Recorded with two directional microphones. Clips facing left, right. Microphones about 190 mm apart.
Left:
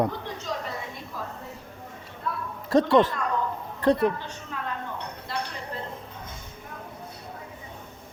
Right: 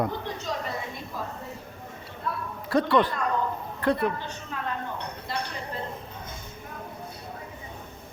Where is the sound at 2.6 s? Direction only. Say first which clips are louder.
Left 3 dB; 40° left (ahead or behind).